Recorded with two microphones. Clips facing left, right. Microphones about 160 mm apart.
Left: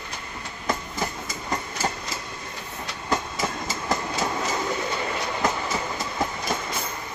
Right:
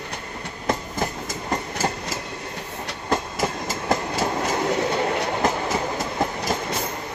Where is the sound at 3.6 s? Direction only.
50° right (ahead or behind).